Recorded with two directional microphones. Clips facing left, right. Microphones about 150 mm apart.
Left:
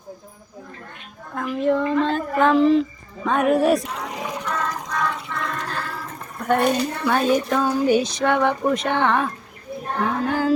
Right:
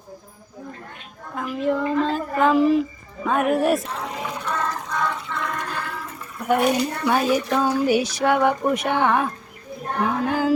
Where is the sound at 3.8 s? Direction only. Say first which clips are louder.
Even; 15° left (ahead or behind).